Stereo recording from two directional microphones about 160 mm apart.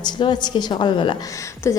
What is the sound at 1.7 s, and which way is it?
Speech, 20° left (ahead or behind).